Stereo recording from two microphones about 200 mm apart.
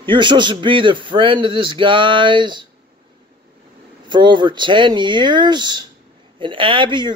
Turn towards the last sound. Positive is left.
turn(degrees=-25)  # may be behind; listen again after turning